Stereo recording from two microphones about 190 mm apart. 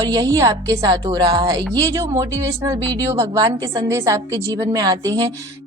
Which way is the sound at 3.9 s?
15° right (ahead or behind).